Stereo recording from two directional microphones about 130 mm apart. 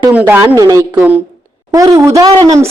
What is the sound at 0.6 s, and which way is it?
A woman's voice, 25° right (ahead or behind).